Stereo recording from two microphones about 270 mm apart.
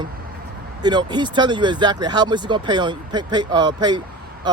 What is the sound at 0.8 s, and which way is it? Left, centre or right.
Speech, centre.